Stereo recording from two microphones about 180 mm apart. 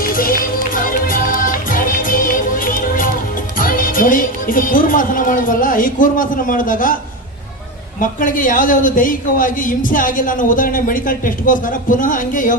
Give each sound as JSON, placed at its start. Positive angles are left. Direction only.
{"t": 0.1, "sound": "music", "side_deg": 55}
{"t": 3.6, "sound": "a man's voice", "side_deg": 50}
{"t": 7.9, "sound": "a man's voice", "side_deg": 50}